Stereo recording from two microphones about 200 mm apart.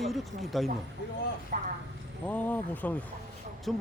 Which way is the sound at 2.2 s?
10° left (ahead or behind).